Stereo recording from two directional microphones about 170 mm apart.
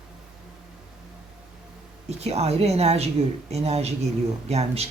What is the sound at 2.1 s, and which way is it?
A woman's voice, 40° right (ahead or behind).